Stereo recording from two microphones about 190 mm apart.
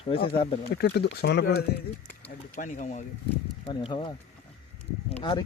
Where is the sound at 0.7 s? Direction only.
60° left (ahead or behind).